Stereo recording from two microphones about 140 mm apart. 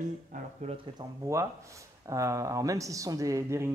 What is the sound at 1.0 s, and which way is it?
Speech, 20° right (ahead or behind).